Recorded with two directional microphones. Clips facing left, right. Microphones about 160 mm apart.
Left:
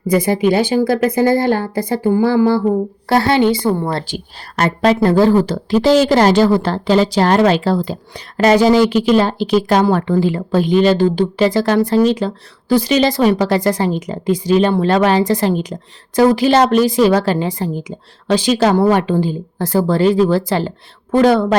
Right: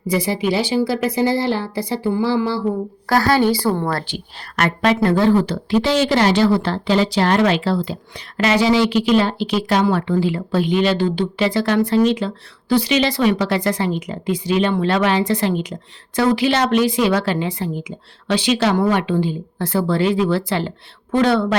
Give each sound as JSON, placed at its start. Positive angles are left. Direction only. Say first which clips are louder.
{"t": 0.1, "sound": "speech", "louder": "left 5 dB", "side_deg": 50}
{"t": 3.1, "sound": "a woman's voice", "louder": "left 2 dB", "side_deg": 25}
{"t": 4.0, "sound": "a woman's voice", "louder": "left 3 dB", "side_deg": 35}